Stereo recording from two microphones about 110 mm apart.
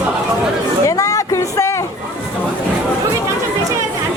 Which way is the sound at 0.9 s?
30° left (ahead or behind).